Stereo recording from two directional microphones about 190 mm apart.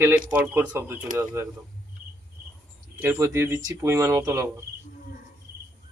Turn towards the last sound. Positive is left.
turn(degrees=-15)  # may be behind; listen again after turning